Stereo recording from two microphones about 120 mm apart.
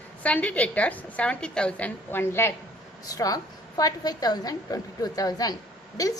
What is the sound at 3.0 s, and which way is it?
A woman's voice, 30° left (ahead or behind).